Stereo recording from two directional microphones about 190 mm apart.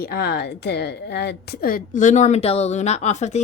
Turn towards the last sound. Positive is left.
turn(degrees=35)  # may be behind; listen again after turning